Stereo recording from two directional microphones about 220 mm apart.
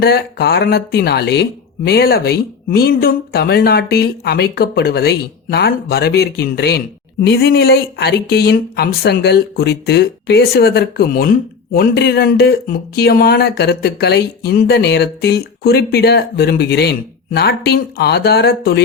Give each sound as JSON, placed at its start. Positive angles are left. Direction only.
{"t": 0.0, "sound": "speech", "side_deg": 45}